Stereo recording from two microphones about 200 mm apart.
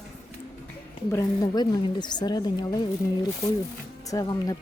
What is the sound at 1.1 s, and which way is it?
A woman's voice, 15° left (ahead or behind).